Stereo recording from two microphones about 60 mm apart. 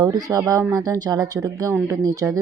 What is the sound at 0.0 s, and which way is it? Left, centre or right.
Speech, right.